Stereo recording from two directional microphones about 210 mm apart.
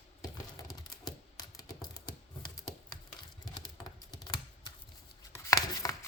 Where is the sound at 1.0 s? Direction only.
20° left (ahead or behind).